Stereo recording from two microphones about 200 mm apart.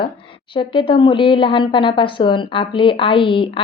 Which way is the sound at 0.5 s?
25° left (ahead or behind).